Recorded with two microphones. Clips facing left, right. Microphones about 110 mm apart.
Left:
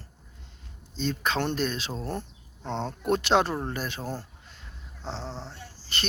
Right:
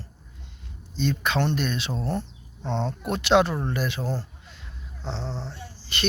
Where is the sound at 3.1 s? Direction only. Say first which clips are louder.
Right 2 dB; 40° left (ahead or behind).